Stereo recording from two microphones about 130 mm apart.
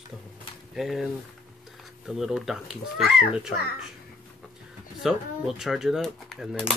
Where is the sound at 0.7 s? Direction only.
Centre (ahead or behind).